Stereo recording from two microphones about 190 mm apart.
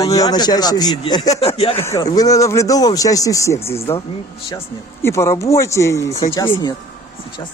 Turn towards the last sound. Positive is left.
turn(degrees=20)  # may be behind; listen again after turning